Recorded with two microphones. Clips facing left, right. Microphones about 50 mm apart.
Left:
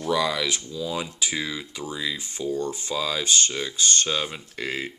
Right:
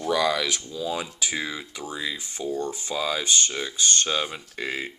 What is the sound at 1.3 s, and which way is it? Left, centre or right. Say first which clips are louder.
Speech: left 1 dB; right.